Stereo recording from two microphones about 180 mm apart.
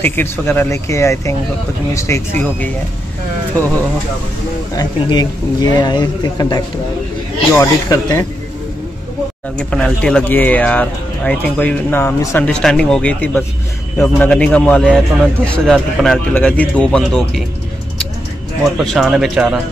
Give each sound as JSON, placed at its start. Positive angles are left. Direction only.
{"t": 0.0, "sound": "speech", "side_deg": 10}
{"t": 4.7, "sound": "speech", "side_deg": 20}
{"t": 9.6, "sound": "speech", "side_deg": 5}
{"t": 12.4, "sound": "speech", "side_deg": 5}
{"t": 18.6, "sound": "speech", "side_deg": 0}